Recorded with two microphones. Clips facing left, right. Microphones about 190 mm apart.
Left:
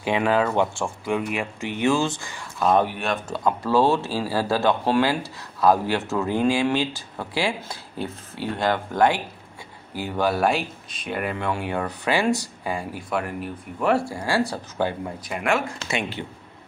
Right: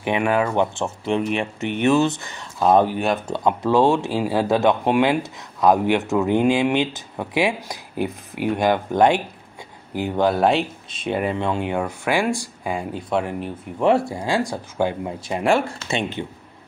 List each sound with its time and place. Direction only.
0.0 s speech: 15° right (ahead or behind)
11.1 s speech: centre (ahead or behind)
11.3 s speech: 20° right (ahead or behind)
15.2 s speech: 30° right (ahead or behind)